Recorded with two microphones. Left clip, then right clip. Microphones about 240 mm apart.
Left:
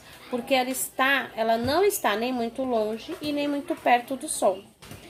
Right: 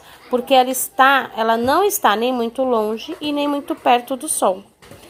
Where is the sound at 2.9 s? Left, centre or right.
Centre.